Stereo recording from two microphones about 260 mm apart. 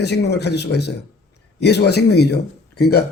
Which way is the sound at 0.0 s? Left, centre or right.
Left.